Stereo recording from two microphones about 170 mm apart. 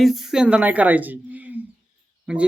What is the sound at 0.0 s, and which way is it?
Speech, centre (ahead or behind).